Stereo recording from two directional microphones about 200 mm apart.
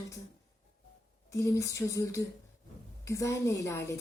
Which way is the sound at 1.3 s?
15° left (ahead or behind).